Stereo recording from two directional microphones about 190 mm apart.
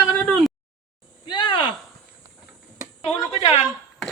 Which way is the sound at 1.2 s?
25° left (ahead or behind).